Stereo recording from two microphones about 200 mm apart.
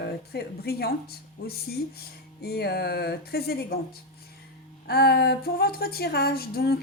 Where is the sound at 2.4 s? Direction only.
55° left (ahead or behind).